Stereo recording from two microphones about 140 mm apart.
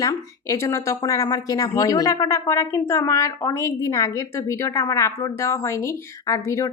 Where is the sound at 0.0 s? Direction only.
25° left (ahead or behind).